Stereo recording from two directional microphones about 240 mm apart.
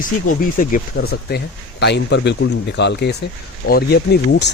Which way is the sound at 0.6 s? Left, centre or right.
Left.